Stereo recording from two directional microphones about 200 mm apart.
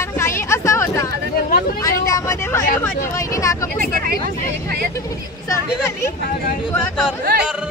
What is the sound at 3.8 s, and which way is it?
Vehicle, 45° right (ahead or behind).